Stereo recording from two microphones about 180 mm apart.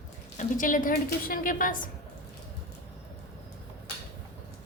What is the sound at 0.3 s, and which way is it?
A woman's voice, 50° left (ahead or behind).